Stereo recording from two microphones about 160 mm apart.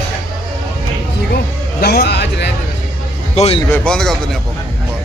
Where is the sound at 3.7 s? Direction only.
5° left (ahead or behind).